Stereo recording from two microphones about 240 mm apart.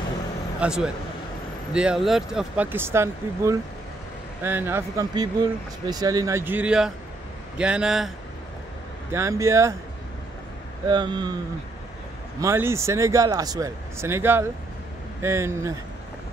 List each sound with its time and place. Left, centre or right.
0.6 s speech: centre
9.1 s speech: centre
10.9 s speech: centre
12.4 s speech: centre